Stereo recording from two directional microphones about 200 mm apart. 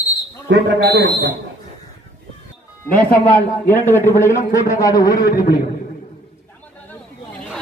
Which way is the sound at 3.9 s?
10° left (ahead or behind).